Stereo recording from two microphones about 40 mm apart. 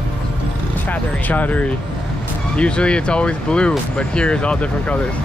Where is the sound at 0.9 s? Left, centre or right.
Left.